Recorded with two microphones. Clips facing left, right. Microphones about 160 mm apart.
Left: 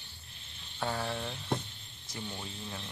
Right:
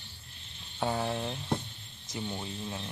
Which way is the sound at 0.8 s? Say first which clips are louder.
Right 4 dB; 20° right (ahead or behind).